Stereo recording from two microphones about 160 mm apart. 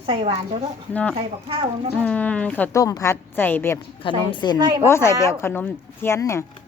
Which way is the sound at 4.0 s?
30° left (ahead or behind).